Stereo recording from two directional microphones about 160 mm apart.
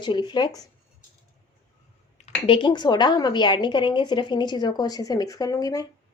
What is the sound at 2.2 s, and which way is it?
A woman's voice, 35° left (ahead or behind).